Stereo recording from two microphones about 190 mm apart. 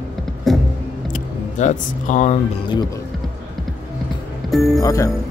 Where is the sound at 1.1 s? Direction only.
40° left (ahead or behind).